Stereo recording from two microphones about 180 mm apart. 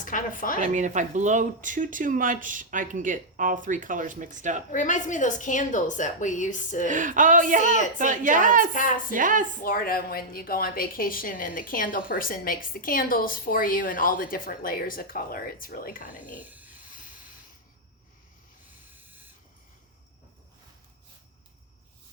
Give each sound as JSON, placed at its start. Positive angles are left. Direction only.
{"t": 0.0, "sound": "speech", "side_deg": 45}
{"t": 0.6, "sound": "speech", "side_deg": -40}
{"t": 4.7, "sound": "a woman's voice", "side_deg": 45}
{"t": 6.8, "sound": "speech", "side_deg": -45}
{"t": 8.7, "sound": "a woman's voice", "side_deg": 45}
{"t": 9.1, "sound": "speech", "side_deg": -45}
{"t": 9.6, "sound": "a woman's voice", "side_deg": 55}
{"t": 16.4, "sound": "a sound", "side_deg": -10}